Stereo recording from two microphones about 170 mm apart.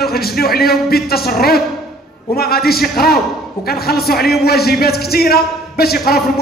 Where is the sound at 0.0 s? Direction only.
65° left (ahead or behind).